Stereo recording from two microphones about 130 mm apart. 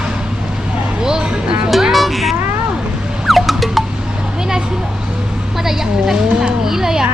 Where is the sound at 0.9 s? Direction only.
5° right (ahead or behind).